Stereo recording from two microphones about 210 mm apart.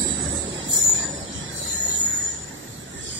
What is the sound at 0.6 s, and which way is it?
Train, 65° right (ahead or behind).